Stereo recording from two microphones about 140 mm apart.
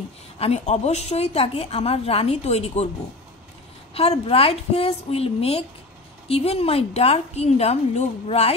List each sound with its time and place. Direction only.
0.4 s a woman's voice: 50° left (ahead or behind)
3.9 s a woman's voice: 45° left (ahead or behind)